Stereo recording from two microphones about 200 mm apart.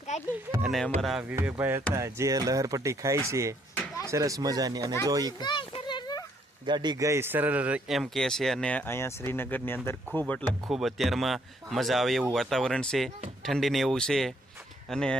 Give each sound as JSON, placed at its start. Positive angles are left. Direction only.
{"t": 1.0, "sound": "speech", "side_deg": -5}
{"t": 5.4, "sound": "a sound", "side_deg": 25}
{"t": 6.7, "sound": "a man's voice", "side_deg": -20}